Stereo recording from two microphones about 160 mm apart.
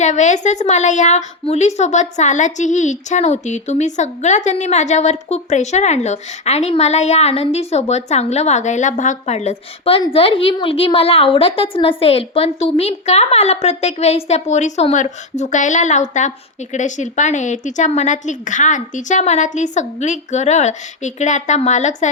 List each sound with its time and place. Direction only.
0.0 s a woman's voice: 45° left (ahead or behind)